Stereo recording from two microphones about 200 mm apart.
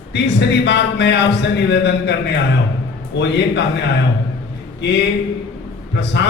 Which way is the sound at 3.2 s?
60° left (ahead or behind).